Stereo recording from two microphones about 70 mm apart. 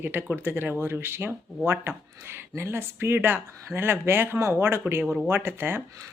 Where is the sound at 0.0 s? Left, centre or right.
Right.